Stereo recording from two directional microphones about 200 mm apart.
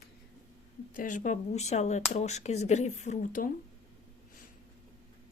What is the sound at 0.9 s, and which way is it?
Speech, 40° left (ahead or behind).